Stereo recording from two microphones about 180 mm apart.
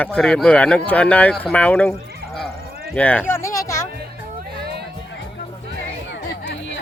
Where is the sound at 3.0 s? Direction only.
10° left (ahead or behind).